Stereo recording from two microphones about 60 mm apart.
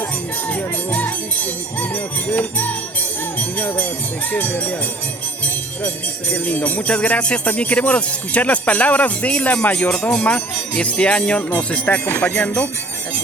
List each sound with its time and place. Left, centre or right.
0.4 s speech: left
5.8 s speech: left
12.0 s speech: left